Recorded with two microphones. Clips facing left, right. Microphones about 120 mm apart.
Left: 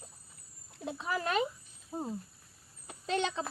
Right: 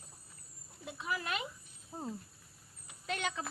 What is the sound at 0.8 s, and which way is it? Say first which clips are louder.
Speech: left 5 dB; 35° left (ahead or behind).